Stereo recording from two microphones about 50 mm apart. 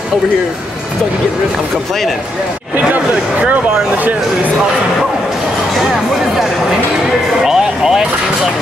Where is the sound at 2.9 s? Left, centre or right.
Right.